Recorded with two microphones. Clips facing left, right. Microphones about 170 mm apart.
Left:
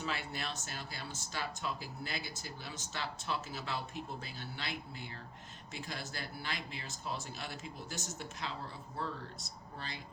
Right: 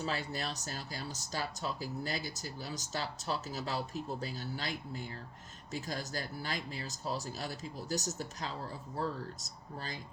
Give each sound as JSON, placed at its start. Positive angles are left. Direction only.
{"t": 0.0, "sound": "speech", "side_deg": -40}